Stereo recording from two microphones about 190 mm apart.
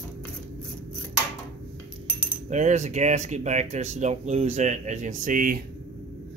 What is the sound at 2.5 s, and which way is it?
Speech, 40° right (ahead or behind).